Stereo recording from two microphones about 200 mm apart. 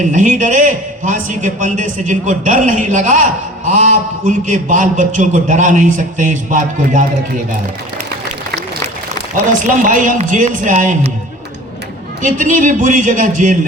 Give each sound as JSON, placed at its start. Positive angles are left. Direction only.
{"t": 0.0, "sound": "a man's voice", "side_deg": -40}
{"t": 9.5, "sound": "a man's voice", "side_deg": -40}
{"t": 12.2, "sound": "a man's voice", "side_deg": -40}